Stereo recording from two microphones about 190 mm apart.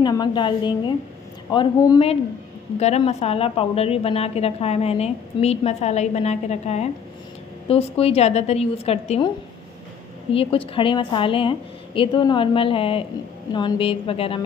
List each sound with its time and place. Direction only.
0.0 s a woman's voice: 20° left (ahead or behind)
2.8 s a woman's voice: 35° left (ahead or behind)
10.3 s a woman's voice: 30° left (ahead or behind)